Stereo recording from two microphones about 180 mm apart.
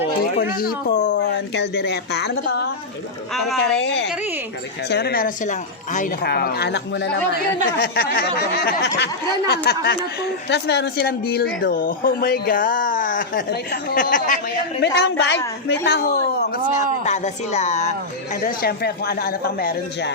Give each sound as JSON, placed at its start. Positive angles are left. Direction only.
{"t": 0.3, "sound": "a woman's voice", "side_deg": 55}
{"t": 3.3, "sound": "speech", "side_deg": 0}
{"t": 3.8, "sound": "a woman's voice", "side_deg": 75}
{"t": 6.2, "sound": "a woman's voice", "side_deg": 60}
{"t": 7.8, "sound": "speech", "side_deg": 60}
{"t": 11.6, "sound": "speech", "side_deg": 50}
{"t": 14.8, "sound": "a woman's voice", "side_deg": 70}
{"t": 16.7, "sound": "speech", "side_deg": 40}
{"t": 18.4, "sound": "speech", "side_deg": 60}